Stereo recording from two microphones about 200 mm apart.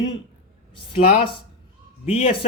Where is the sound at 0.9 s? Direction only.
25° left (ahead or behind).